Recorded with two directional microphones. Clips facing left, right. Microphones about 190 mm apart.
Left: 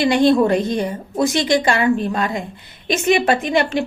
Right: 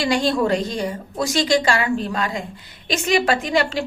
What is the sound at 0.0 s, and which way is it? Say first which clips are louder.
A woman's voice: left 5 dB; 20° left (ahead or behind).